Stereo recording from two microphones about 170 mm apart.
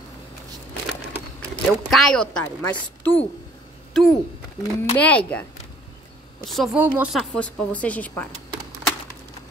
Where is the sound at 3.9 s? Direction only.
Centre (ahead or behind).